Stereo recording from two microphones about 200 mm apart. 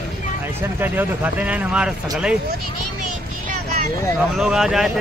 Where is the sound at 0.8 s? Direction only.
10° right (ahead or behind).